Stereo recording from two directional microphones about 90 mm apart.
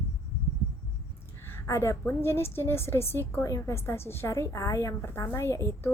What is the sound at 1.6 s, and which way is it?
A woman's voice, 35° left (ahead or behind).